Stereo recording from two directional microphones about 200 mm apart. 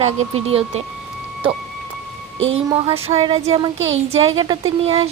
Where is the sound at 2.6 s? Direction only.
25° right (ahead or behind).